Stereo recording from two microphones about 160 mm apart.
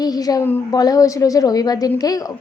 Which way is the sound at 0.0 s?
25° left (ahead or behind).